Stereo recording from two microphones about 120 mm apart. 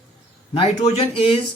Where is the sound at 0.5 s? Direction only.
65° left (ahead or behind).